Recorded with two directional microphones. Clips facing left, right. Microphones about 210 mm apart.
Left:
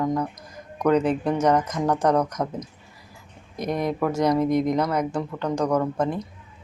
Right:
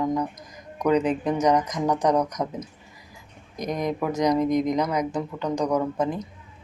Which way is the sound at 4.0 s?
15° right (ahead or behind).